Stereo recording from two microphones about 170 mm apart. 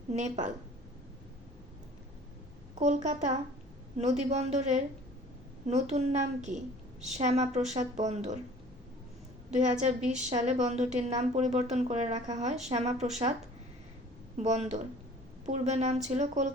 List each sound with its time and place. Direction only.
0.1 s a woman's voice: 45° right (ahead or behind)
2.7 s a woman's voice: 45° right (ahead or behind)
9.5 s a woman's voice: 45° right (ahead or behind)
14.3 s a woman's voice: 45° right (ahead or behind)